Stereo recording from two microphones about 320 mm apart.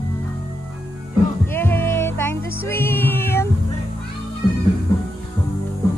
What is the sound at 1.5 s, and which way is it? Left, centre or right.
Music, centre.